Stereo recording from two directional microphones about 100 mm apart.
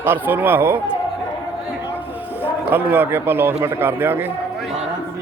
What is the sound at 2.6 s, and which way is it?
Speech, 20° right (ahead or behind).